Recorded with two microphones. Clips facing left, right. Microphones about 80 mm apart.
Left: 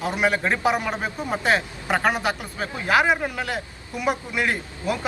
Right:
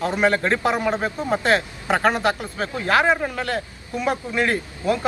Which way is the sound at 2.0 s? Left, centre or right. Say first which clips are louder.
Right 3 dB; centre.